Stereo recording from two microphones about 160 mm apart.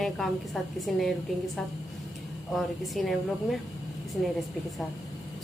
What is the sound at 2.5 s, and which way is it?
A woman's voice, centre (ahead or behind).